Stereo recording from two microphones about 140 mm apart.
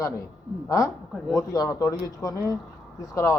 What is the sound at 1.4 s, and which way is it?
A woman's voice, 25° left (ahead or behind).